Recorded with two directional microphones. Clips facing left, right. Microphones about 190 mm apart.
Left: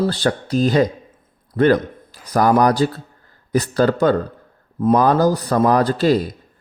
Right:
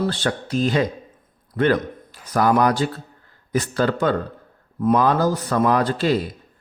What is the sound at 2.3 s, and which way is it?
Speech, 40° left (ahead or behind).